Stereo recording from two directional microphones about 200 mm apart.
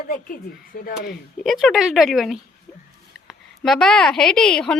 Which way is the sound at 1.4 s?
Centre (ahead or behind).